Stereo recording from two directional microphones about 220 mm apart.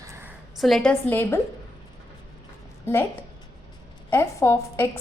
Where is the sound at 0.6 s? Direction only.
Centre (ahead or behind).